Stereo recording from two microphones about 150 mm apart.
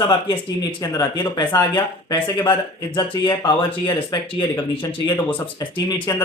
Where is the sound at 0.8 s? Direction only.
30° left (ahead or behind).